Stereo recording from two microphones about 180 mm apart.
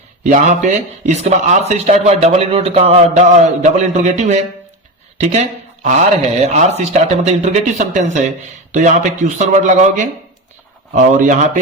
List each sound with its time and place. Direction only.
0.3 s speech: 45° right (ahead or behind)